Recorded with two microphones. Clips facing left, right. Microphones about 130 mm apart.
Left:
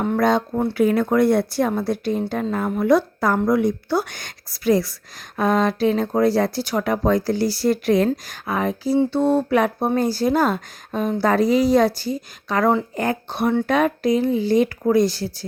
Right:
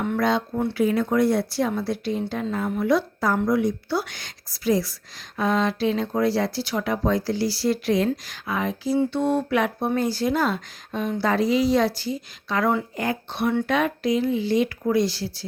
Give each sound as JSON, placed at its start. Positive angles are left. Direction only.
{"t": 0.0, "sound": "speech", "side_deg": 40}